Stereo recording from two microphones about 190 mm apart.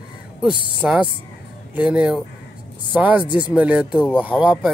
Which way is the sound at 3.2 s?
25° left (ahead or behind).